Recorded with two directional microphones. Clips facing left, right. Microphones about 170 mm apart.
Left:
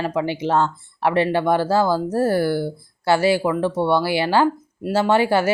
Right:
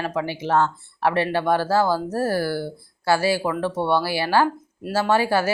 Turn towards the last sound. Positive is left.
turn(degrees=20)  # may be behind; listen again after turning